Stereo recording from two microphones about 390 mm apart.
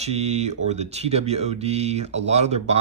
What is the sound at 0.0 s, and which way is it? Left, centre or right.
Speech, centre.